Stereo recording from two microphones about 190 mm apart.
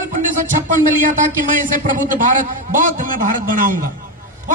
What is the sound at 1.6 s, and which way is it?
A man's voice, 45° right (ahead or behind).